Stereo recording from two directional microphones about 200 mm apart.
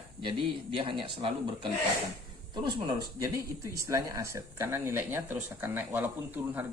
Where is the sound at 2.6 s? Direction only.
20° right (ahead or behind).